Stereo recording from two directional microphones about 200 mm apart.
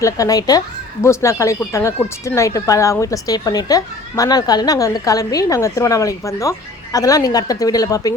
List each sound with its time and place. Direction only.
0.0 s speech: 15° left (ahead or behind)